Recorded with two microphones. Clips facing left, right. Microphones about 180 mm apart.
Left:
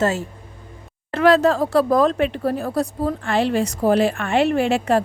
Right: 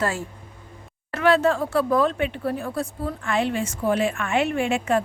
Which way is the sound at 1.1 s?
40° left (ahead or behind).